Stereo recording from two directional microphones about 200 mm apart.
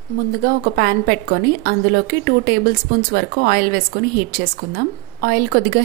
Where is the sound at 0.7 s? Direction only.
50° right (ahead or behind).